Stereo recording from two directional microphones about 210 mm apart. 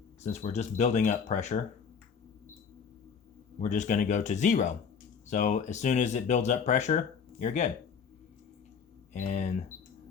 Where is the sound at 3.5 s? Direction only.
35° left (ahead or behind).